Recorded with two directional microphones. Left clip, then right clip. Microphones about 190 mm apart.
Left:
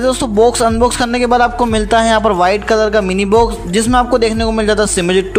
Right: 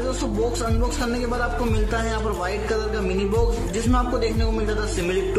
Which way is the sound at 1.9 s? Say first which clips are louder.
Left 15 dB; 45° left (ahead or behind).